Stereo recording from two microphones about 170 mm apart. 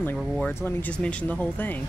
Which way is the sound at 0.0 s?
10° left (ahead or behind).